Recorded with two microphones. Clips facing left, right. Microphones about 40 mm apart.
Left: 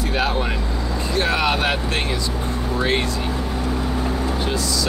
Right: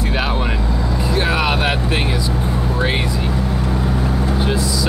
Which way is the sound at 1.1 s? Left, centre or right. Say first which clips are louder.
Right 1 dB; centre.